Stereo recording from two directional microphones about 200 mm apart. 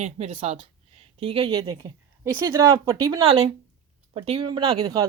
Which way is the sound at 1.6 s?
20° right (ahead or behind).